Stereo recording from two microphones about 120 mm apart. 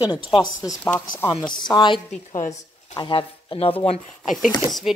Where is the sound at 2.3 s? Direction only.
70° left (ahead or behind).